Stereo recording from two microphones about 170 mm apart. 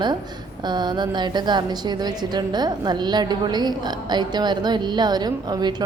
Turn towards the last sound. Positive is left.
turn(degrees=-25)  # may be behind; listen again after turning